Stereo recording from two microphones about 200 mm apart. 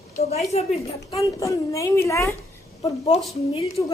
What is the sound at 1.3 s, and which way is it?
A woman's voice, 15° left (ahead or behind).